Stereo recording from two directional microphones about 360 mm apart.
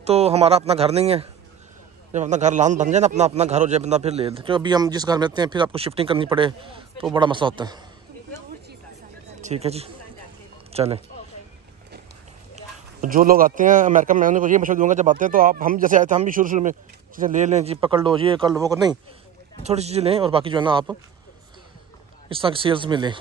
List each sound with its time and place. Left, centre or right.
0.0 s a man's voice: centre
9.4 s speech: centre
12.5 s a man's voice: right
22.3 s a man's voice: centre